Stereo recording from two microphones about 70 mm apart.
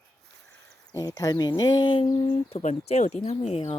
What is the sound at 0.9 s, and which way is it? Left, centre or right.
Speech, left.